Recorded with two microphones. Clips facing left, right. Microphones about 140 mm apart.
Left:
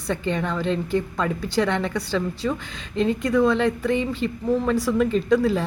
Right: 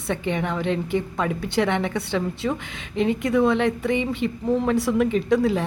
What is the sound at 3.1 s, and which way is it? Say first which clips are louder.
A woman's voice: even; 25° right (ahead or behind).